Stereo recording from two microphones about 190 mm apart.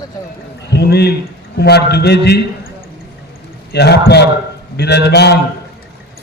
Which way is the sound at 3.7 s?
60° left (ahead or behind).